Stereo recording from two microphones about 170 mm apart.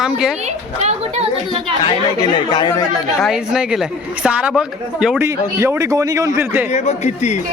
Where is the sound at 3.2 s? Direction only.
Centre (ahead or behind).